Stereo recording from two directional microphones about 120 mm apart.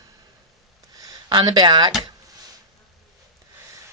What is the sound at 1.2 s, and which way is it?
Speech, 35° right (ahead or behind).